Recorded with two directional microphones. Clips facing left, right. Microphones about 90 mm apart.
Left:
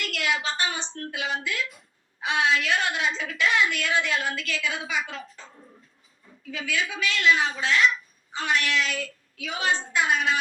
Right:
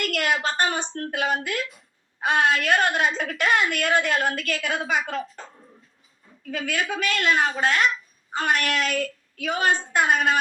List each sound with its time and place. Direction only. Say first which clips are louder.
0.0 s a woman's voice: right 4 dB; 50° right (ahead or behind)